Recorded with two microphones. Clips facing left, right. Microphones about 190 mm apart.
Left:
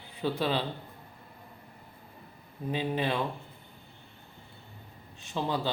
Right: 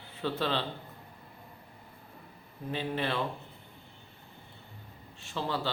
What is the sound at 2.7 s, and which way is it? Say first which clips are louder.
Speech: left 2 dB; 15° left (ahead or behind).